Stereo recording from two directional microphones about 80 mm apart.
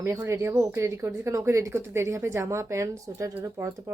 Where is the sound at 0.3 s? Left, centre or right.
Right.